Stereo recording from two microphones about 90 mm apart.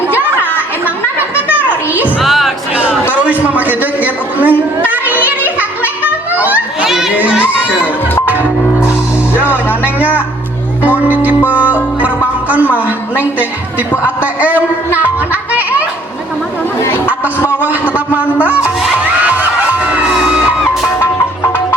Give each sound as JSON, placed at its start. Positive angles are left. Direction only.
{"t": 1.5, "sound": "music", "side_deg": -20}
{"t": 2.2, "sound": "music", "side_deg": 0}
{"t": 3.1, "sound": "a sound", "side_deg": -15}
{"t": 5.5, "sound": "music", "side_deg": -20}
{"t": 6.8, "sound": "children playing", "side_deg": -5}
{"t": 7.3, "sound": "crowd", "side_deg": -15}
{"t": 7.8, "sound": "music", "side_deg": 25}
{"t": 10.8, "sound": "music", "side_deg": -20}
{"t": 13.1, "sound": "a sound", "side_deg": -20}
{"t": 14.9, "sound": "children playing", "side_deg": -20}
{"t": 17.5, "sound": "a sound", "side_deg": -20}